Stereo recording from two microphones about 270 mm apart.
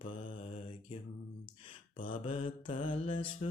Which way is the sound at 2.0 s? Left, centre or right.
Left.